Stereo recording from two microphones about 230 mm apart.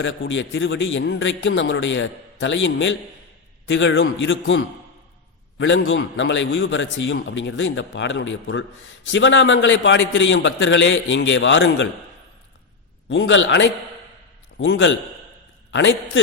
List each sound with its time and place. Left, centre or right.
0.0 s a man's voice: left
13.1 s a man's voice: left